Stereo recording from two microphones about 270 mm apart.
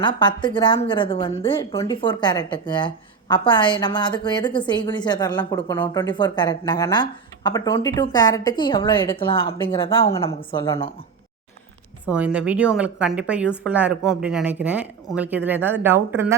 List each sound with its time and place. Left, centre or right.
0.0 s a woman's voice: centre
12.0 s a woman's voice: centre